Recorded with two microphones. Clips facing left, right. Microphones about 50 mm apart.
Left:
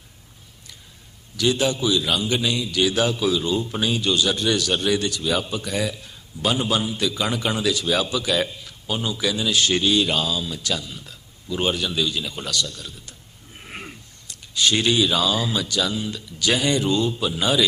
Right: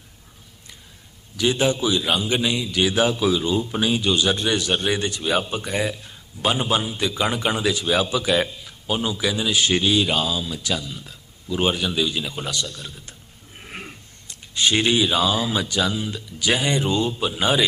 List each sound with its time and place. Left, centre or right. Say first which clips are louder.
1.4 s a man's voice: right 1 dB; right
14.3 s a man's voice: even; right